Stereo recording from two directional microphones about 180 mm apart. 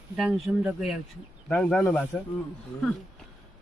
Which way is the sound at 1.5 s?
10° left (ahead or behind).